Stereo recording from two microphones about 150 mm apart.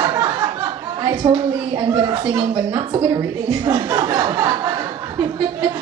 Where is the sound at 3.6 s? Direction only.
25° right (ahead or behind).